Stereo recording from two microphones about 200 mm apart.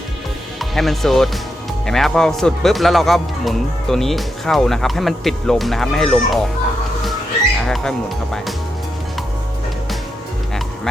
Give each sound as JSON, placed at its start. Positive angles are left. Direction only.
{"t": 0.6, "sound": "a man's voice", "side_deg": 0}
{"t": 7.7, "sound": "speech", "side_deg": 0}